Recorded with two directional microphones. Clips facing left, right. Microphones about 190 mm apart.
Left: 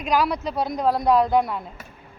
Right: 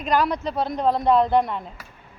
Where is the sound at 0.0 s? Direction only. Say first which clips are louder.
Even; 10° left (ahead or behind).